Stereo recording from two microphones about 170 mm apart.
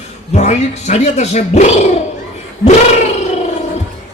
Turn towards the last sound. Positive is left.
turn(degrees=40)  # may be behind; listen again after turning